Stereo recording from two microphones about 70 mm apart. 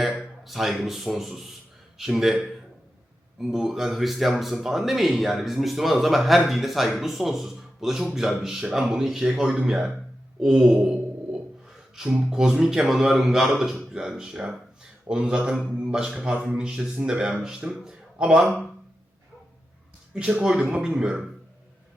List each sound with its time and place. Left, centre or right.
0.4 s speech: centre
10.4 s mantra: centre
11.9 s a man's voice: centre
20.1 s a man's voice: centre